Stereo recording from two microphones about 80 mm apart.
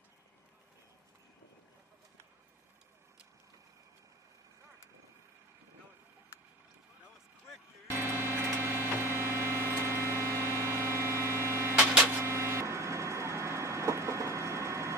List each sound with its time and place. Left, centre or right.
7.9 s vehicle: right
12.2 s printer: right